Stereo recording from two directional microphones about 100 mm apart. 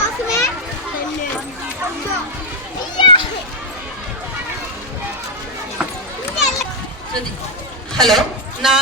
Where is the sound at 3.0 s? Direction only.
55° left (ahead or behind).